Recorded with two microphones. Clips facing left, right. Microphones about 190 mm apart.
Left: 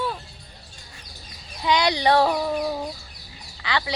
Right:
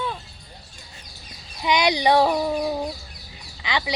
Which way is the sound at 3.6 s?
15° right (ahead or behind).